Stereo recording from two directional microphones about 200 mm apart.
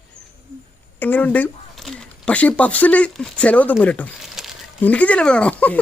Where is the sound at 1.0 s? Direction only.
10° left (ahead or behind).